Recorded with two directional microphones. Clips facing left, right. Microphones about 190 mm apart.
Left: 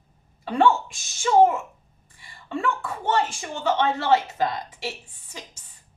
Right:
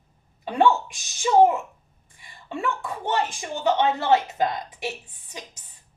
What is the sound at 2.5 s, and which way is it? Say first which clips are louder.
A woman's voice: left 1 dB; 15° right (ahead or behind).